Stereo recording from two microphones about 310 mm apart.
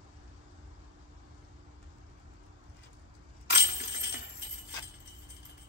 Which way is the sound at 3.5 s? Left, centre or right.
Left.